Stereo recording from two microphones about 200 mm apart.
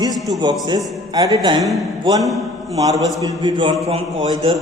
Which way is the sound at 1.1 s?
20° right (ahead or behind).